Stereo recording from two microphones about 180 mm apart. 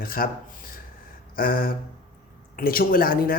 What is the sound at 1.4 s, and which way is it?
Speech, 55° left (ahead or behind).